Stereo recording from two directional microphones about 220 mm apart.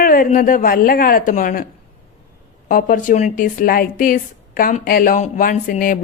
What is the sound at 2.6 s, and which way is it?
Speech, 40° left (ahead or behind).